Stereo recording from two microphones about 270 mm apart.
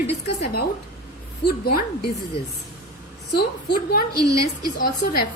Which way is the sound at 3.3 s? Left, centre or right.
Left.